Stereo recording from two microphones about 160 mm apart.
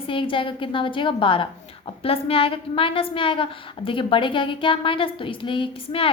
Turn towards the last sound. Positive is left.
turn(degrees=35)  # may be behind; listen again after turning